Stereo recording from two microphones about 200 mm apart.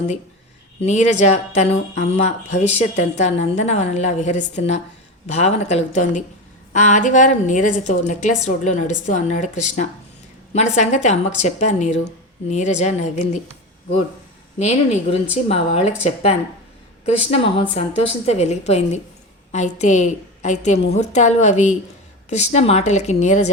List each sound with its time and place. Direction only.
0.8 s speech: 35° left (ahead or behind)
14.6 s speech: 30° left (ahead or behind)